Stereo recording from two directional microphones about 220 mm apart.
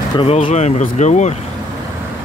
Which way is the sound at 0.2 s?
25° left (ahead or behind).